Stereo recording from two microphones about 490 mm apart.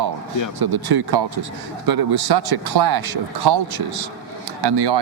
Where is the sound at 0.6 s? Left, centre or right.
Right.